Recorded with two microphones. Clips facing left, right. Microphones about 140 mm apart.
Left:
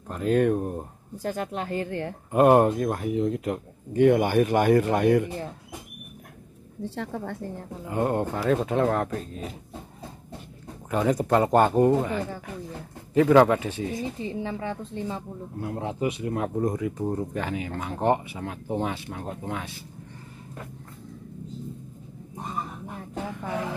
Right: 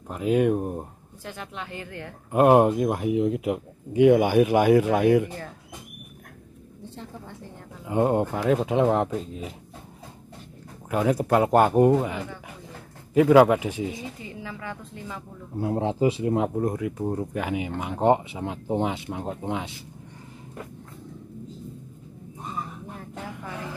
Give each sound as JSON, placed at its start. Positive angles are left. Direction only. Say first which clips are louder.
{"t": 0.1, "sound": "speech", "louder": "even", "side_deg": -10}
{"t": 1.1, "sound": "speech", "louder": "left 8 dB", "side_deg": 40}
{"t": 2.3, "sound": "speech", "louder": "right 1 dB", "side_deg": -5}
{"t": 7.0, "sound": "a woman's voice", "louder": "left 8 dB", "side_deg": 65}
{"t": 7.8, "sound": "speech", "louder": "right 3 dB", "side_deg": -20}
{"t": 10.9, "sound": "speech", "louder": "right 1 dB", "side_deg": -5}
{"t": 14.2, "sound": "a woman's voice", "louder": "left 6 dB", "side_deg": 30}
{"t": 15.5, "sound": "speech", "louder": "right 6 dB", "side_deg": -30}
{"t": 16.5, "sound": "speech", "louder": "even", "side_deg": -5}